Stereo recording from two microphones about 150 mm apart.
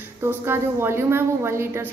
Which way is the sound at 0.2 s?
15° right (ahead or behind).